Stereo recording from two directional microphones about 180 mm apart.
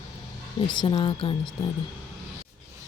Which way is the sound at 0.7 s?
25° left (ahead or behind).